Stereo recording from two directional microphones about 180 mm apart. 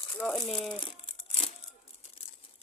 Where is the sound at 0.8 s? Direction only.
30° left (ahead or behind).